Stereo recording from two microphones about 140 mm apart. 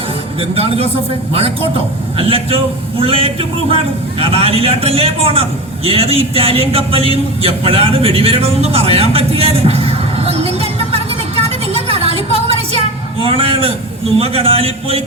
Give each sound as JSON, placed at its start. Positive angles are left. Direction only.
{"t": 0.3, "sound": "a man's voice", "side_deg": -45}
{"t": 13.2, "sound": "a sound", "side_deg": -45}
{"t": 14.2, "sound": "a man's voice", "side_deg": -45}